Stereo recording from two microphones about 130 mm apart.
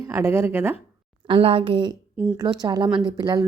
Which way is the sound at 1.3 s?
45° right (ahead or behind).